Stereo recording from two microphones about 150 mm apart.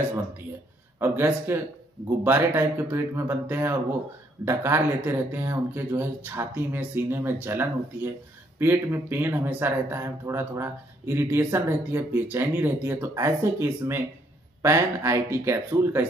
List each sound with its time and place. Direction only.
0.9 s speech: 15° right (ahead or behind)